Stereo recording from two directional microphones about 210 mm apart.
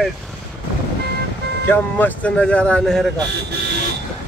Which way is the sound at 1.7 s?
10° left (ahead or behind).